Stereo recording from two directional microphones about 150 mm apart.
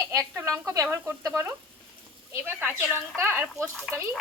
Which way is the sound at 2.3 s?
15° right (ahead or behind).